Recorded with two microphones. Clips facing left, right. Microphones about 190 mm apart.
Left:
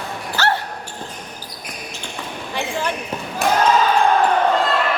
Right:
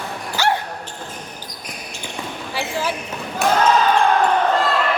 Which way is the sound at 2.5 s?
5° right (ahead or behind).